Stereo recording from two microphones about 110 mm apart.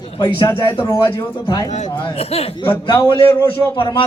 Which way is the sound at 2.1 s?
65° left (ahead or behind).